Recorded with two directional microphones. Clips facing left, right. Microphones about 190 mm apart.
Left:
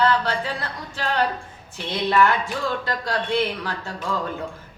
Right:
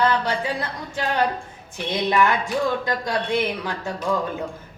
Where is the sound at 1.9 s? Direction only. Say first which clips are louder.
Even; 15° right (ahead or behind).